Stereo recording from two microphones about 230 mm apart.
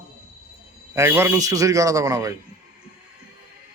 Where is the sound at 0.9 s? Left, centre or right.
Centre.